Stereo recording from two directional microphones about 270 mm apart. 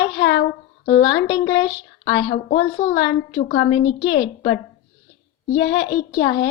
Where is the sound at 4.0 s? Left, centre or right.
Centre.